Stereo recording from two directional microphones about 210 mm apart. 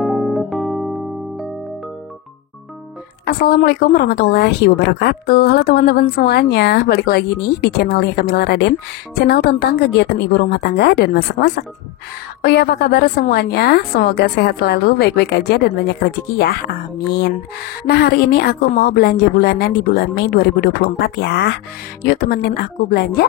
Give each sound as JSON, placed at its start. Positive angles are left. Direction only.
{"t": 0.0, "sound": "electric piano", "side_deg": 0}
{"t": 3.3, "sound": "a woman's voice", "side_deg": 45}